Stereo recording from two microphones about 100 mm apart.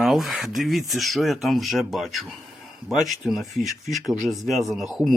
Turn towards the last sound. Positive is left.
turn(degrees=0)  # may be behind; listen again after turning